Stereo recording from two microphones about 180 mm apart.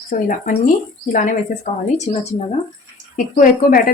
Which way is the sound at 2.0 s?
40° left (ahead or behind).